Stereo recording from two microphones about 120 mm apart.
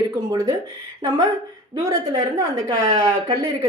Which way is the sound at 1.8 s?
30° right (ahead or behind).